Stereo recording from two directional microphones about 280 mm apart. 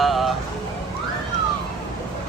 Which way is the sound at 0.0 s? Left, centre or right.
Centre.